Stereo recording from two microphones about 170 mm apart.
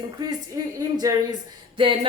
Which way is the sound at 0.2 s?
20° right (ahead or behind).